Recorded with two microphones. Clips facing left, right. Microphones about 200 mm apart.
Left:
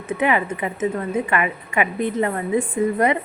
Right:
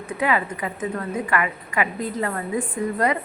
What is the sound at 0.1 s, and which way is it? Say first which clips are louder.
A woman's voice: left 3 dB; 20° left (ahead or behind).